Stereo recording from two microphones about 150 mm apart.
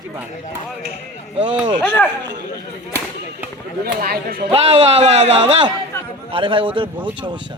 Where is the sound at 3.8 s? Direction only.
90° right.